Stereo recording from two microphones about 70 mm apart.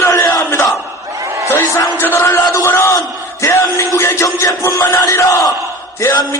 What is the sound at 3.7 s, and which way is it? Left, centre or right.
A man's voice, left.